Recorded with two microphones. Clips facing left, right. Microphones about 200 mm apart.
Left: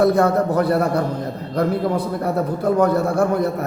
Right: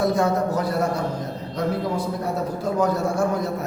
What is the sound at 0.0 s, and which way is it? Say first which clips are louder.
A man's voice: left 5 dB; 60° left (ahead or behind).